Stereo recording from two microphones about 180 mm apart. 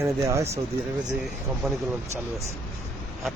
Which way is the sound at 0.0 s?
15° right (ahead or behind).